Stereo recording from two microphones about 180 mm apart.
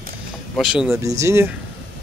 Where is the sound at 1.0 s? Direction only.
15° right (ahead or behind).